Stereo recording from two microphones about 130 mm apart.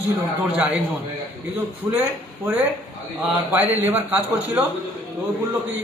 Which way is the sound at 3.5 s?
15° right (ahead or behind).